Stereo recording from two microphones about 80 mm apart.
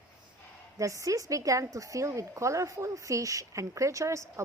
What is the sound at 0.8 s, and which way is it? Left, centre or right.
A woman's voice, right.